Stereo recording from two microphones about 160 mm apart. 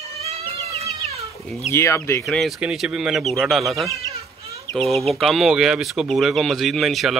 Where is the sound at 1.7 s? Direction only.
15° left (ahead or behind).